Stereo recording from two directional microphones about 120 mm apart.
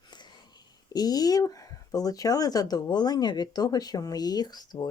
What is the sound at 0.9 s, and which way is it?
Speech, 35° left (ahead or behind).